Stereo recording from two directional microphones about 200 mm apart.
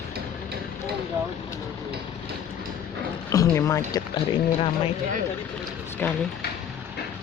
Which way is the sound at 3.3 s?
15° left (ahead or behind).